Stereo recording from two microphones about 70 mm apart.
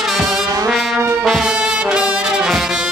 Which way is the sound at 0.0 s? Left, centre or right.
Centre.